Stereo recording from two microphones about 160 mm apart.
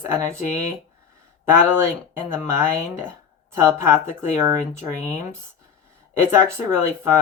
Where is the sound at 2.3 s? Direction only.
15° right (ahead or behind).